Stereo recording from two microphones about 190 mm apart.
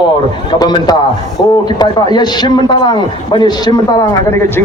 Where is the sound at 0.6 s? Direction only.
20° left (ahead or behind).